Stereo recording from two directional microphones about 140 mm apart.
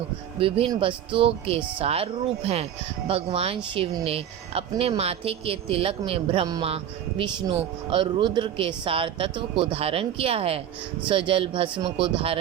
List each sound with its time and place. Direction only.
0.3 s speech: 40° right (ahead or behind)
3.1 s speech: 45° right (ahead or behind)